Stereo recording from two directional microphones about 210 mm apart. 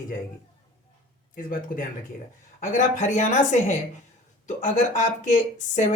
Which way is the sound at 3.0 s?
35° left (ahead or behind).